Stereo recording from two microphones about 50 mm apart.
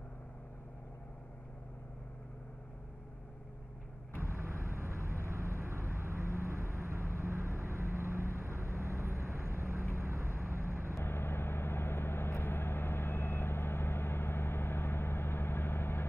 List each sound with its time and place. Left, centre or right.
4.2 s vehicle: right
11.1 s vehicle: left